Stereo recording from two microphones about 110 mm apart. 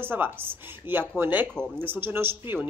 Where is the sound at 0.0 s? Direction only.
20° right (ahead or behind).